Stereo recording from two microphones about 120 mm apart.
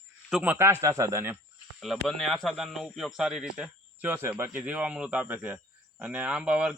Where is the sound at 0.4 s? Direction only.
20° right (ahead or behind).